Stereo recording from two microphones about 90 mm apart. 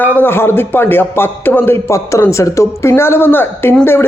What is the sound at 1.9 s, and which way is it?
A man's voice, 35° left (ahead or behind).